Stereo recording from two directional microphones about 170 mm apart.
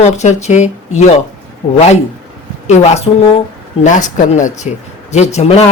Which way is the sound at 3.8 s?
45° left (ahead or behind).